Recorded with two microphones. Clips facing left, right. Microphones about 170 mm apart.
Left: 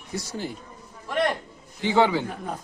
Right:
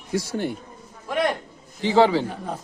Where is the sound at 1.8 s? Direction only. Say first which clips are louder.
Right 3 dB; 30° right (ahead or behind).